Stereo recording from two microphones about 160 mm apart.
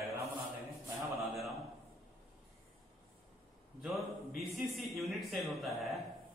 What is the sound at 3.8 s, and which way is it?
A man's voice, centre (ahead or behind).